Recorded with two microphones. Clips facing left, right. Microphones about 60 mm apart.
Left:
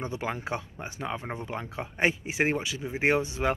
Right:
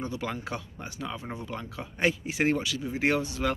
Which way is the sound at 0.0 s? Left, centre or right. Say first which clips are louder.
Left 1 dB; left.